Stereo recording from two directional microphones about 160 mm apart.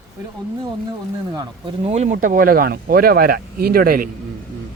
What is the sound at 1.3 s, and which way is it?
Speech, 35° right (ahead or behind).